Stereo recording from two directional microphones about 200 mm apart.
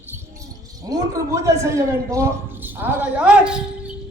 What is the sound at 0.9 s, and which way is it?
A man's voice, 15° right (ahead or behind).